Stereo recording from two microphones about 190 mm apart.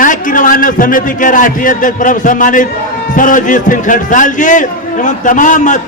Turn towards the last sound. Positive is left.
turn(degrees=40)  # may be behind; listen again after turning